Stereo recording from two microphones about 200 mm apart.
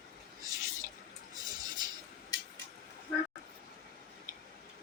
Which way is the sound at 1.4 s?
20° right (ahead or behind).